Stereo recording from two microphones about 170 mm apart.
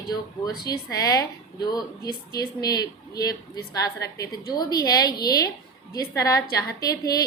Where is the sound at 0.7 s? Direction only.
20° left (ahead or behind).